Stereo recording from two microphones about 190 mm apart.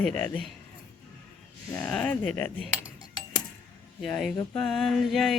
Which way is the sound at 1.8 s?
5° left (ahead or behind).